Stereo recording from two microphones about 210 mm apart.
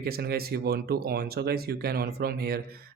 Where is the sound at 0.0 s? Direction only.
45° right (ahead or behind).